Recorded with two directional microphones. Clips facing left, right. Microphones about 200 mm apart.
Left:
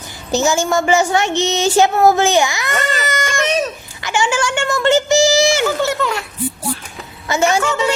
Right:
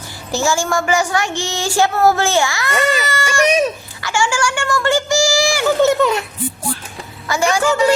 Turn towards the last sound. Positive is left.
turn(degrees=25)  # may be behind; listen again after turning